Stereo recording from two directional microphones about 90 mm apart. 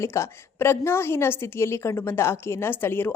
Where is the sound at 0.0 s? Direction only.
30° left (ahead or behind).